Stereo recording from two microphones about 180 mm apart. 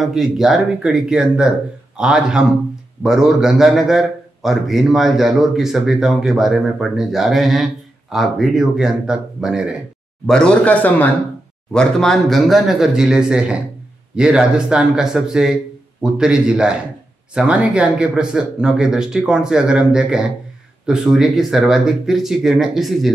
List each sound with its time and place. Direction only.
0.0 s a man's voice: centre (ahead or behind)